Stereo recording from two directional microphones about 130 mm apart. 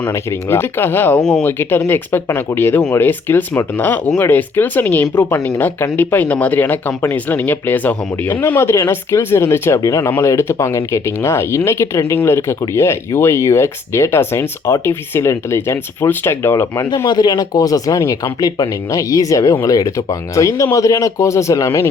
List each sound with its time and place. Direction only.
0.1 s speech: 20° left (ahead or behind)
1.9 s speech: 15° left (ahead or behind)